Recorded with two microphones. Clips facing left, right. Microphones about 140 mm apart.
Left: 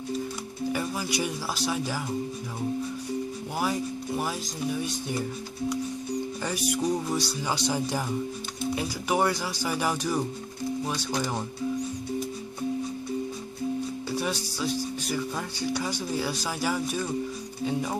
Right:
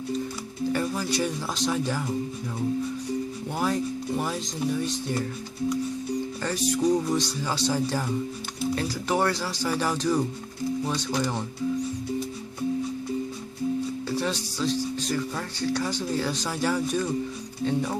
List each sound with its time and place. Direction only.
0.7 s speech: 10° left (ahead or behind)
3.5 s speech: 10° left (ahead or behind)
6.4 s speech: 10° left (ahead or behind)
14.1 s speech: 10° left (ahead or behind)